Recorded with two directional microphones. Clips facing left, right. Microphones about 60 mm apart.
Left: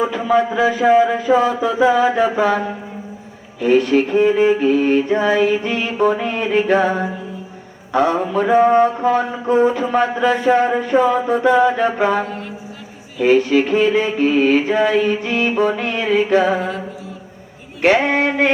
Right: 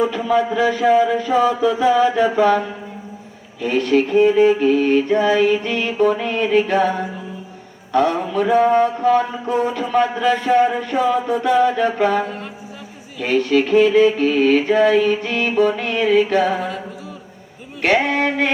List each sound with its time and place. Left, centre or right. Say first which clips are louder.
0.0 s mantra: left 1 dB; centre
1.3 s speech: left 2 dB; left
1.8 s mantra: left 2 dB; centre
3.6 s mantra: left 3 dB; centre
8.4 s speech: left 2 dB; left
10.9 s a sound: left 5 dB; left
11.3 s speech: left 3 dB; centre
13.1 s mantra: left 3 dB; centre
18.1 s speech: left 3 dB; left